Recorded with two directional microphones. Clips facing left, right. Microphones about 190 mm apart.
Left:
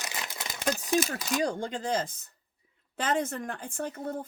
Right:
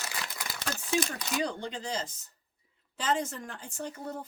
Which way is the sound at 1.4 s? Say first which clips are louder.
Left 5 dB; 50° left (ahead or behind).